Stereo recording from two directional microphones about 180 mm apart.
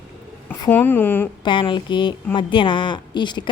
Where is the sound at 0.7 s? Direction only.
10° left (ahead or behind).